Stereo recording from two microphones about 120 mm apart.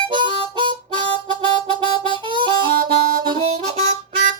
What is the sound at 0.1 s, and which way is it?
Harmonica, 40° right (ahead or behind).